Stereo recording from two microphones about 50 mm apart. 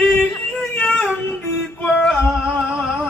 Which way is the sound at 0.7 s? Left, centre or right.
Left.